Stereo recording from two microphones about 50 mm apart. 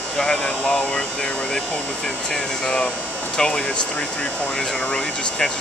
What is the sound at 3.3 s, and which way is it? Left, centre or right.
Speech, centre.